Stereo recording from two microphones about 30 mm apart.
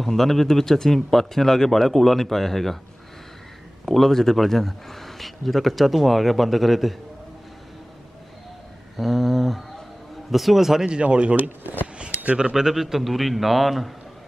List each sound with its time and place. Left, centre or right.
0.0 s speech: centre
3.8 s speech: centre
8.9 s a man's voice: centre
11.0 s speech: right
11.3 s speech: right
12.7 s a man's voice: centre